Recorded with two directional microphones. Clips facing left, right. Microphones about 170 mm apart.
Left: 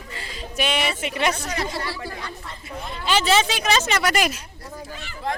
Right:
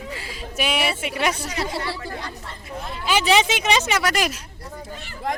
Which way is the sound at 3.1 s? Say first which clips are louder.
Right 1 dB; 15° right (ahead or behind).